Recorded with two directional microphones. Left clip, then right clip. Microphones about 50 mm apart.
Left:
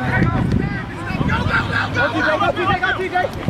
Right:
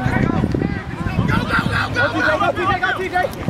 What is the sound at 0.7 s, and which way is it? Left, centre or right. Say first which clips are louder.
Vehicle: even; centre.